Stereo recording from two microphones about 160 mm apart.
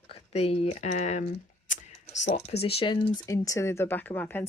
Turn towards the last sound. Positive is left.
turn(degrees=15)  # may be behind; listen again after turning